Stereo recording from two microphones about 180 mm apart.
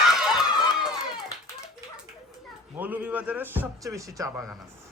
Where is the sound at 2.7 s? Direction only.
10° right (ahead or behind).